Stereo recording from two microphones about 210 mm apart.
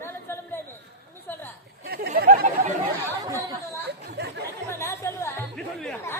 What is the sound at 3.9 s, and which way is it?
Chatter, 50° right (ahead or behind).